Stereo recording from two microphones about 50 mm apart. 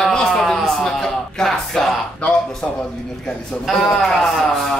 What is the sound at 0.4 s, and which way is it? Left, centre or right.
Music, centre.